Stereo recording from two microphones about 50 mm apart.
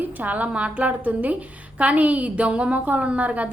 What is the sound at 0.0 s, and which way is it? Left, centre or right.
A woman's voice, right.